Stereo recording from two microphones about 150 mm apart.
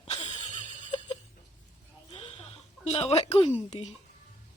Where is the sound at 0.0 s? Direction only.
35° left (ahead or behind).